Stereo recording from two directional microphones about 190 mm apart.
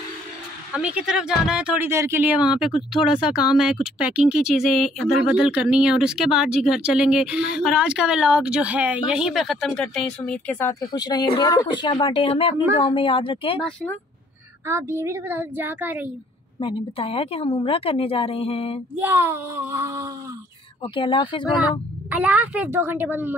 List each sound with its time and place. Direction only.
0.7 s speech: 5° right (ahead or behind); by 13.6 s 25° left (ahead or behind)
14.7 s a woman's voice: 15° right (ahead or behind)
16.5 s speech: 30° left (ahead or behind)
18.9 s a woman's voice: 10° right (ahead or behind)
20.8 s speech: 25° left (ahead or behind)
22.1 s a woman's voice: 10° right (ahead or behind)